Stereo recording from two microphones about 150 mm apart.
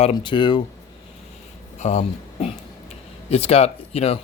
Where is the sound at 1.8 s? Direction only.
45° left (ahead or behind).